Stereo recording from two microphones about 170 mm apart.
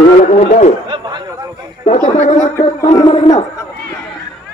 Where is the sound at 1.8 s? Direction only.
40° left (ahead or behind).